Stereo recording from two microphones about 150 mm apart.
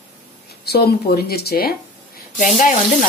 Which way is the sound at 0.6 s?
90° left.